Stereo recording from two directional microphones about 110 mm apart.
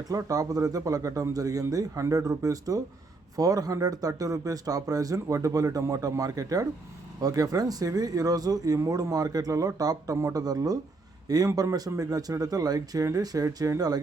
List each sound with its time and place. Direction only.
0.1 s speech: 30° right (ahead or behind)